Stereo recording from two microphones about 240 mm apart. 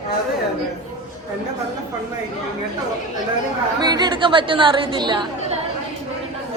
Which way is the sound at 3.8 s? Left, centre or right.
Centre.